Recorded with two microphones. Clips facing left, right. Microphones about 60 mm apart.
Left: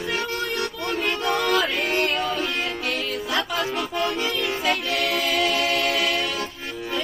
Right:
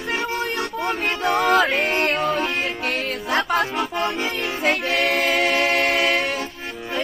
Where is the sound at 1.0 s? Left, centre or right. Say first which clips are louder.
Even; right.